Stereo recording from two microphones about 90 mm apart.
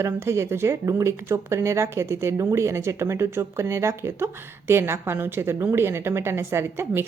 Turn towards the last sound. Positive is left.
turn(degrees=-30)  # may be behind; listen again after turning